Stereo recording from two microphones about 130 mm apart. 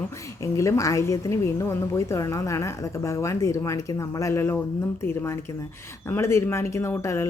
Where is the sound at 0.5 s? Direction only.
25° left (ahead or behind).